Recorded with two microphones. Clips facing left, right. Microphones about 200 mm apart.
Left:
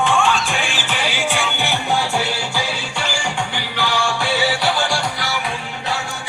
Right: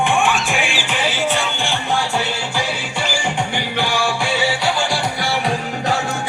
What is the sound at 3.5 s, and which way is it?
Music, 20° right (ahead or behind).